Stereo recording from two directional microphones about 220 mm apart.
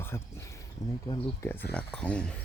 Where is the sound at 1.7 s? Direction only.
5° left (ahead or behind).